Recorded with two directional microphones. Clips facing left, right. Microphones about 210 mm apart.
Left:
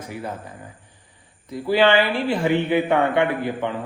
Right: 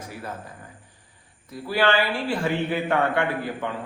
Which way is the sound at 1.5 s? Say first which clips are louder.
Left 5 dB; 20° left (ahead or behind).